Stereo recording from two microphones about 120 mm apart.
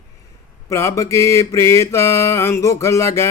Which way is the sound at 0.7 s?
25° left (ahead or behind).